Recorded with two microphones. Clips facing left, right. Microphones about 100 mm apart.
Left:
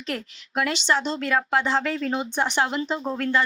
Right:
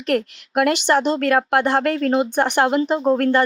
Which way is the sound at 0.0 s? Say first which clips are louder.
Right 11 dB; 60° right (ahead or behind).